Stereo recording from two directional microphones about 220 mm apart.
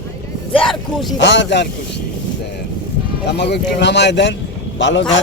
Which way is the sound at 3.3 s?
50° left (ahead or behind).